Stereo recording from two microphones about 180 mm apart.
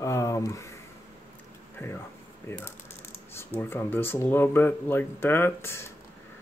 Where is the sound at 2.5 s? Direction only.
15° left (ahead or behind).